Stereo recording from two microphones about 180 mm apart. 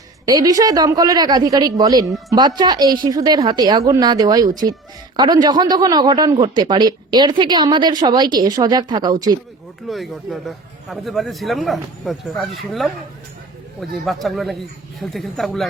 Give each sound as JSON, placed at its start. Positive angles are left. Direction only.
{"t": 0.3, "sound": "a man's voice", "side_deg": -20}
{"t": 9.9, "sound": "speech", "side_deg": 0}
{"t": 13.9, "sound": "speech", "side_deg": 0}